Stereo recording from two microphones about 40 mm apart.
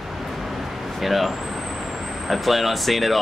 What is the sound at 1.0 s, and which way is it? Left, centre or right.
Speech, centre.